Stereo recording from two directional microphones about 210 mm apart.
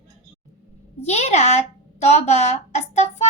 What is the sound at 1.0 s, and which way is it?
A woman's voice, 30° left (ahead or behind).